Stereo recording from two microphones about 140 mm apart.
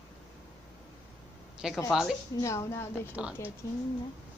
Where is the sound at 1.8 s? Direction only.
Centre (ahead or behind).